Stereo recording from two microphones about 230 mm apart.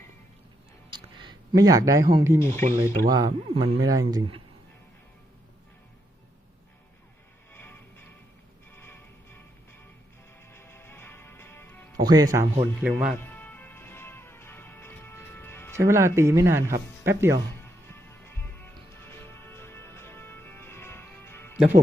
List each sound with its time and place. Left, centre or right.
0.9 s speech: centre
2.4 s speech: centre
3.1 s speech: centre
7.5 s music: centre
10.5 s music: centre
11.9 s speech: centre
13.1 s music: centre
15.7 s speech: centre
17.8 s music: centre